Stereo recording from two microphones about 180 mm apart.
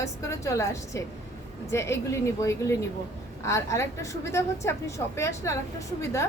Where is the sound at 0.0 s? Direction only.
15° left (ahead or behind).